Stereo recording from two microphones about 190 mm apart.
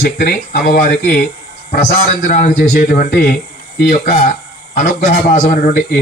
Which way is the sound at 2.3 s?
45° left (ahead or behind).